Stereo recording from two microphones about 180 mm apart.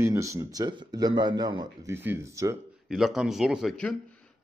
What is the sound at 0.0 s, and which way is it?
Speech, 15° right (ahead or behind).